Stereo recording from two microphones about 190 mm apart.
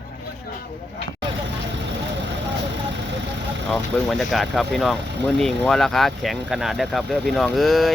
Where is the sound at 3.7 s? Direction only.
Centre (ahead or behind).